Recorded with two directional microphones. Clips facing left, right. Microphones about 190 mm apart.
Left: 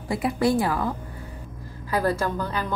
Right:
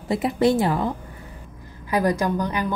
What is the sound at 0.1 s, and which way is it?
A woman's voice, 20° right (ahead or behind).